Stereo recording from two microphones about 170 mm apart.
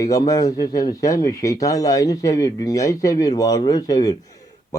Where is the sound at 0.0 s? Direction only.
20° left (ahead or behind).